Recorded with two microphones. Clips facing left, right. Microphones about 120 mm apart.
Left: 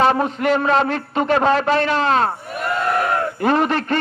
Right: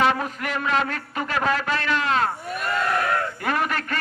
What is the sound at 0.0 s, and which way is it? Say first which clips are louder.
A man's voice: left 6 dB; 30° left (ahead or behind).